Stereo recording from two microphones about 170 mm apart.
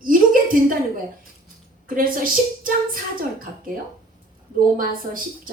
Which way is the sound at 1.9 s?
55° right (ahead or behind).